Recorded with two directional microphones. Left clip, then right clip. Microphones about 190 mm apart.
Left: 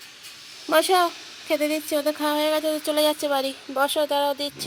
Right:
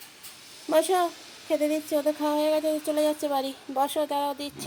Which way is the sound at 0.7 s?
Centre (ahead or behind).